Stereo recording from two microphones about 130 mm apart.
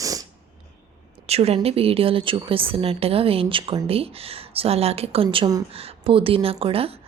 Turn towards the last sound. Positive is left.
turn(degrees=-45)  # may be behind; listen again after turning